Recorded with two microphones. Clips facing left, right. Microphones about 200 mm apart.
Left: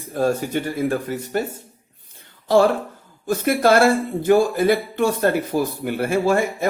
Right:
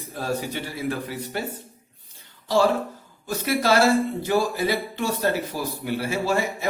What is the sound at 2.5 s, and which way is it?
Speech, 55° left (ahead or behind).